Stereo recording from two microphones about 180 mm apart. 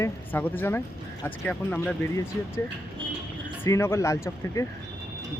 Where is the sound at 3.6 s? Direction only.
15° left (ahead or behind).